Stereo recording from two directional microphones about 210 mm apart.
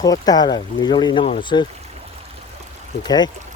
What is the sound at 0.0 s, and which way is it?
Speech, 20° left (ahead or behind).